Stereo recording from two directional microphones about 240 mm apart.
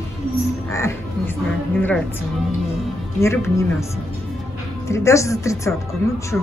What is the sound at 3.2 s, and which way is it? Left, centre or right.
Speech, centre.